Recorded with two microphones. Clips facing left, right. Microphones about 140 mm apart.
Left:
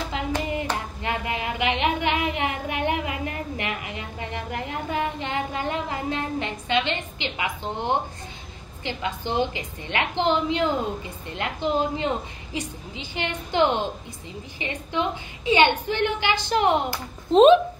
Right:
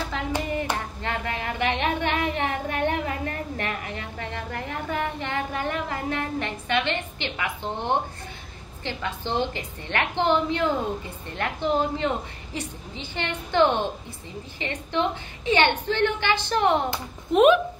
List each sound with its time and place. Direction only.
1.0 s a sound: 15° left (ahead or behind)
8.8 s a woman's voice: 15° left (ahead or behind)
17.3 s speech: 25° left (ahead or behind)